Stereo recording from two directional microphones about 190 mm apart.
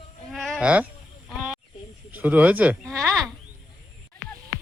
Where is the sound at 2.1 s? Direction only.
10° right (ahead or behind).